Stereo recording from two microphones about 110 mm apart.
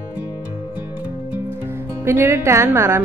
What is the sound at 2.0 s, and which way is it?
A woman's voice, 25° right (ahead or behind).